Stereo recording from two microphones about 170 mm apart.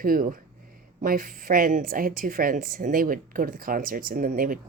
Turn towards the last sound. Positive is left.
turn(degrees=-55)  # may be behind; listen again after turning